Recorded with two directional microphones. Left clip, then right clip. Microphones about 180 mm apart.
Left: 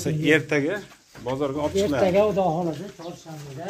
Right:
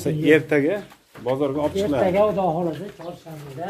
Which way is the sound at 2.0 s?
75° left (ahead or behind).